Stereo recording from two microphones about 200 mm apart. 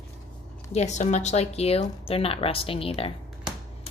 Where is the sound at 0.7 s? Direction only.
35° left (ahead or behind).